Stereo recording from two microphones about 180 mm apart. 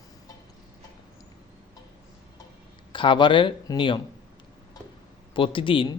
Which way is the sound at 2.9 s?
30° left (ahead or behind).